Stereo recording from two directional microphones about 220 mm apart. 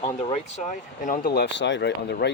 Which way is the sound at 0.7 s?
35° left (ahead or behind).